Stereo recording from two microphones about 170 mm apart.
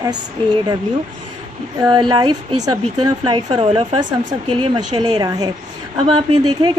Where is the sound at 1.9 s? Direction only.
25° right (ahead or behind).